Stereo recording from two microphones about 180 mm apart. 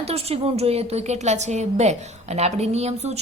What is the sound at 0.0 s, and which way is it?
A woman's voice, 35° right (ahead or behind).